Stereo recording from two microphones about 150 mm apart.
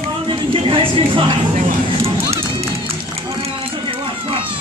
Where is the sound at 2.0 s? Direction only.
45° right (ahead or behind).